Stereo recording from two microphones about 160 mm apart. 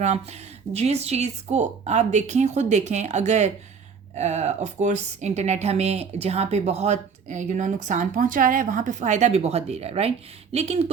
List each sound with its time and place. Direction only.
0.0 s speech: 45° right (ahead or behind)